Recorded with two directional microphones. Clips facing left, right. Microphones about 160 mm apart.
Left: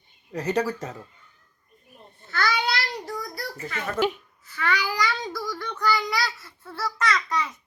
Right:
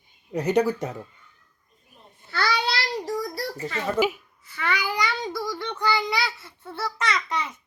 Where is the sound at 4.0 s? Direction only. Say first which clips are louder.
Left 1 dB; 5° right (ahead or behind).